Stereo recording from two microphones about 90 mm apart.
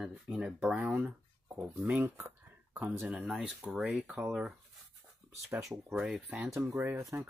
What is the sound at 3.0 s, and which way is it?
Speech, 5° right (ahead or behind).